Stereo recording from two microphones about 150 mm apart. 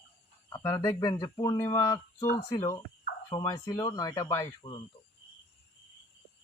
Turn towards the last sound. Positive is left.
turn(degrees=35)  # may be behind; listen again after turning